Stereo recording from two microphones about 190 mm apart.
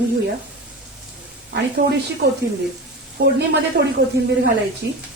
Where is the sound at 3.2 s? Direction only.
60° right (ahead or behind).